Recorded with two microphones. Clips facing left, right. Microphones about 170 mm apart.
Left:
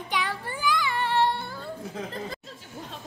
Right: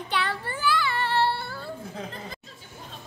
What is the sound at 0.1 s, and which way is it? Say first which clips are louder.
Child singing: right 1 dB; 10° left (ahead or behind).